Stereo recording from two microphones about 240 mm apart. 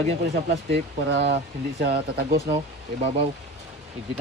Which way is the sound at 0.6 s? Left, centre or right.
Right.